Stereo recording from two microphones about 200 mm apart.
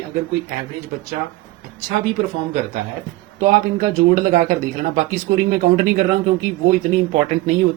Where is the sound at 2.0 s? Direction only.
40° right (ahead or behind).